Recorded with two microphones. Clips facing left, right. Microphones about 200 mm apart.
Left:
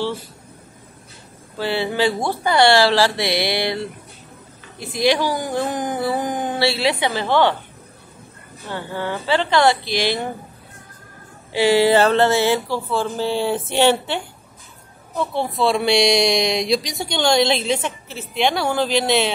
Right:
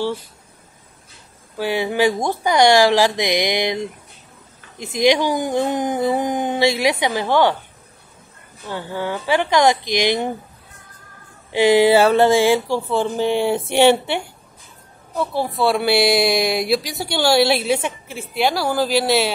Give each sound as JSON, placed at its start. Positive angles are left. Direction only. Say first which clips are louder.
{"t": 1.6, "sound": "speech", "louder": "right 2 dB", "side_deg": -15}
{"t": 8.6, "sound": "speech", "louder": "right 1 dB", "side_deg": -10}
{"t": 11.5, "sound": "speech", "louder": "right 2 dB", "side_deg": -15}
{"t": 15.1, "sound": "speech", "louder": "right 1 dB", "side_deg": 0}